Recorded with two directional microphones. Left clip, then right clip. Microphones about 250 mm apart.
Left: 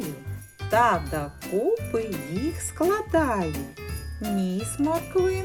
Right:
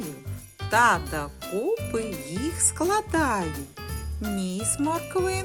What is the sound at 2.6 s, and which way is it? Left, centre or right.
Speech, centre.